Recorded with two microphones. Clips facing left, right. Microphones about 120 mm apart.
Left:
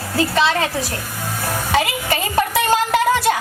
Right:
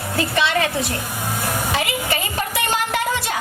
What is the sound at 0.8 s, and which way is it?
Speech, 15° right (ahead or behind).